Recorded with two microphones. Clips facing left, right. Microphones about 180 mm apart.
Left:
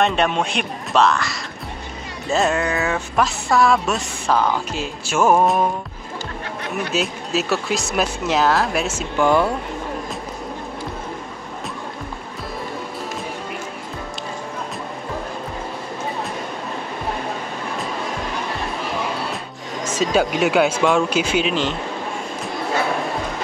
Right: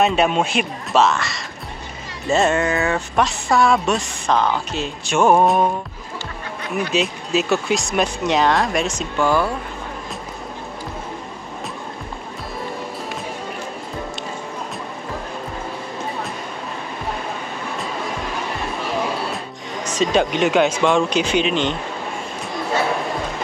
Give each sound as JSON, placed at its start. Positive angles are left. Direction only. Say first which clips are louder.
{"t": 0.0, "sound": "speech", "louder": "right 2 dB", "side_deg": -5}
{"t": 6.9, "sound": "speech", "louder": "right 2 dB", "side_deg": 0}
{"t": 9.2, "sound": "speech", "louder": "left 2 dB", "side_deg": 20}
{"t": 19.3, "sound": "speech", "louder": "even", "side_deg": 5}